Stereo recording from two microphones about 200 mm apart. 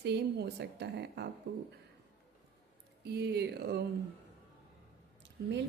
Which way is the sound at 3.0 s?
55° right (ahead or behind).